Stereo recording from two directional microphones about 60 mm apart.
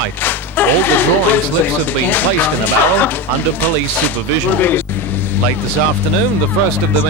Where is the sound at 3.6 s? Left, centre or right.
Left.